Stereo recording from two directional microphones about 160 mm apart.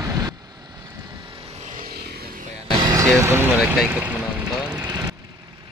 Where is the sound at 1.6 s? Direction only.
50° right (ahead or behind).